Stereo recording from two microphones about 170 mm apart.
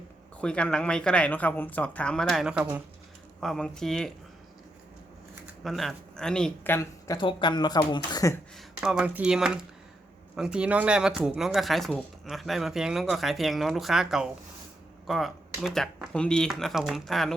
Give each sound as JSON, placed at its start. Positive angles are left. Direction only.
{"t": 0.3, "sound": "speech", "side_deg": 5}
{"t": 5.6, "sound": "speech", "side_deg": 0}
{"t": 6.7, "sound": "speech", "side_deg": 25}
{"t": 8.5, "sound": "speech", "side_deg": -5}